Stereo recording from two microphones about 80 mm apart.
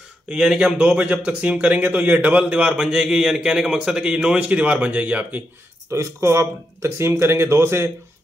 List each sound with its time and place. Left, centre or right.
0.3 s speech: centre
5.9 s speech: right